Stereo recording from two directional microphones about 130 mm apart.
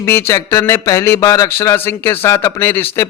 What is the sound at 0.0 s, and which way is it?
Speech, 20° left (ahead or behind).